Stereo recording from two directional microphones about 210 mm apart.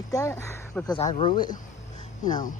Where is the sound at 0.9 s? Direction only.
25° left (ahead or behind).